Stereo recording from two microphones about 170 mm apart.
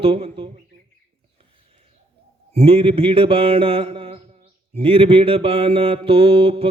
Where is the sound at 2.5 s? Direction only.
35° right (ahead or behind).